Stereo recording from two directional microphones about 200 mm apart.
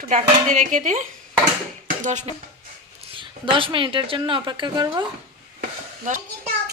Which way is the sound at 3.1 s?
25° right (ahead or behind).